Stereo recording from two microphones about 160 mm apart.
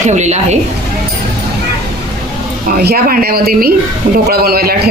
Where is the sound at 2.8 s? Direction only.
75° right (ahead or behind).